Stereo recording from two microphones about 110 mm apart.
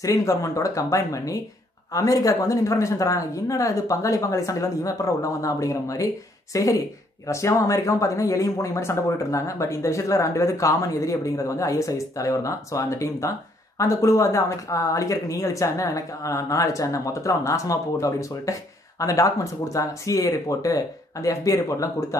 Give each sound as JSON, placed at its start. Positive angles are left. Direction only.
{"t": 0.0, "sound": "speech", "side_deg": 30}